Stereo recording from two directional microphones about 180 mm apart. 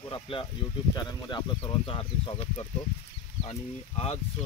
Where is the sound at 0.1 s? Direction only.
25° left (ahead or behind).